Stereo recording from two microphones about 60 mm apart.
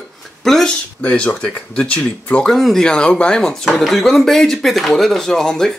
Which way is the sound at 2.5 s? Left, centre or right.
Centre.